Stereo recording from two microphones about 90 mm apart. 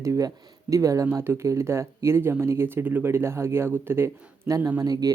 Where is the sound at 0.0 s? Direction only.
35° right (ahead or behind).